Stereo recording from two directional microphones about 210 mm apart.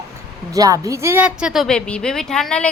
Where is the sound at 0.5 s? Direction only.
15° right (ahead or behind); by 2.7 s 5° left (ahead or behind).